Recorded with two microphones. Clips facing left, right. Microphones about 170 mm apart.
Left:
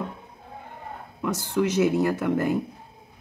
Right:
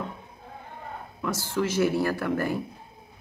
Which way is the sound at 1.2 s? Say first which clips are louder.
Left 3 dB; 20° left (ahead or behind).